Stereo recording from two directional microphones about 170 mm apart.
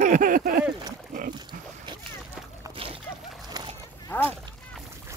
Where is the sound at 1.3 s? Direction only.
25° right (ahead or behind).